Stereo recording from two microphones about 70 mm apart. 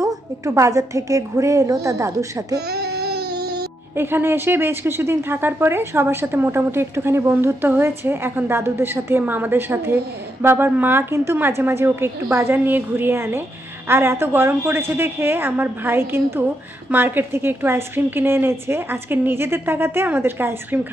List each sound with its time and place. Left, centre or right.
0.0 s a woman's voice: right
3.9 s a woman's voice: right